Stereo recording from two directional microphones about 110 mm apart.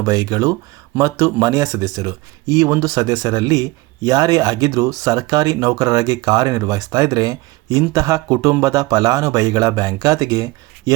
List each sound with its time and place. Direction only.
0.0 s speech: 35° right (ahead or behind)